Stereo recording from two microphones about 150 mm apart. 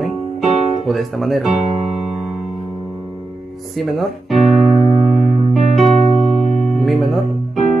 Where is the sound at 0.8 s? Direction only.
Centre (ahead or behind).